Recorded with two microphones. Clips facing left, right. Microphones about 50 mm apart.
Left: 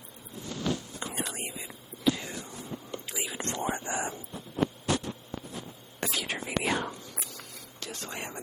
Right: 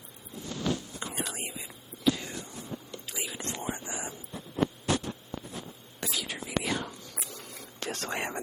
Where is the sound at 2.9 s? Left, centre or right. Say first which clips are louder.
Left 4 dB; left.